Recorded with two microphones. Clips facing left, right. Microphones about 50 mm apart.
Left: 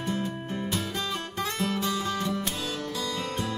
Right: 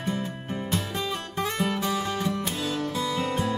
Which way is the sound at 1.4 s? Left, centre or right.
Right.